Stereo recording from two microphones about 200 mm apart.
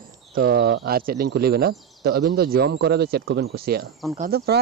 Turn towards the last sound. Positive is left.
turn(degrees=-50)  # may be behind; listen again after turning